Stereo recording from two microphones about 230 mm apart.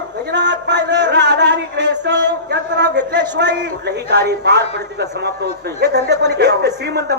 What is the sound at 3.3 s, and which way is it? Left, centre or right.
Speech, right.